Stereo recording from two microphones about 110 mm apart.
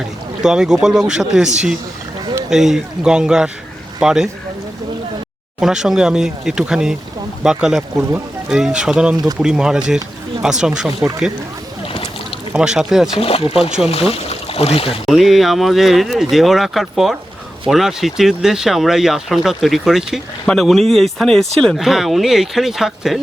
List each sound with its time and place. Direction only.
0.4 s speech: 5° right (ahead or behind)
5.5 s speech: 5° right (ahead or behind)
12.5 s speech: 5° right (ahead or behind)
13.1 s speech: 60° left (ahead or behind)
15.0 s speech: centre (ahead or behind)